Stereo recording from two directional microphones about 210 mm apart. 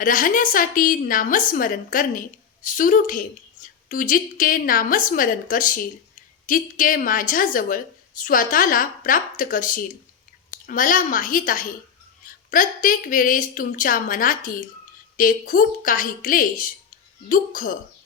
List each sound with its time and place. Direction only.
0.0 s a woman's voice: 40° left (ahead or behind)